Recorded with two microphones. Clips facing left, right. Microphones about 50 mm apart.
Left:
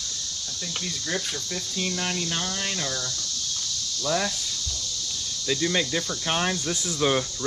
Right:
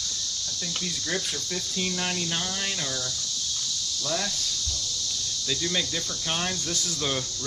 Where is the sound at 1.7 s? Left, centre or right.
Centre.